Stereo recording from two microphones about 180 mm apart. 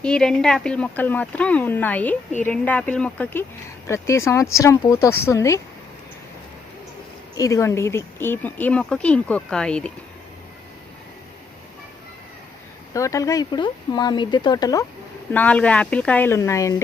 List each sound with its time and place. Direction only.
0.0 s speech: 5° left (ahead or behind)
7.3 s speech: 15° left (ahead or behind)
12.9 s speech: 15° left (ahead or behind)
15.3 s speech: 10° left (ahead or behind)